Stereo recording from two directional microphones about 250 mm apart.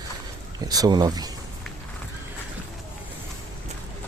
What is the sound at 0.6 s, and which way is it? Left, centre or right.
Speech, centre.